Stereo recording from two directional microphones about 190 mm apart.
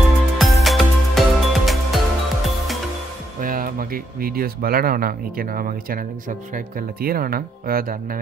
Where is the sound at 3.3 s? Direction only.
45° right (ahead or behind).